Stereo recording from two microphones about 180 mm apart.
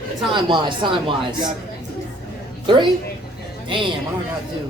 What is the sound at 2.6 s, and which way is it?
Speech, 25° right (ahead or behind).